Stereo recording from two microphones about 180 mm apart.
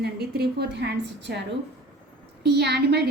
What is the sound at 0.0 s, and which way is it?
A woman's voice, 65° right (ahead or behind).